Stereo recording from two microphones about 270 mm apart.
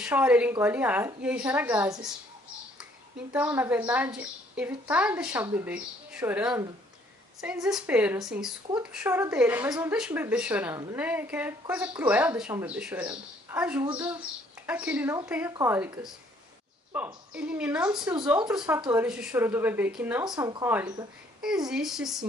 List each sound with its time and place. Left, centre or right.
0.0 s a woman's voice: centre
3.3 s a woman's voice: centre
17.9 s a woman's voice: centre
18.5 s a woman's voice: centre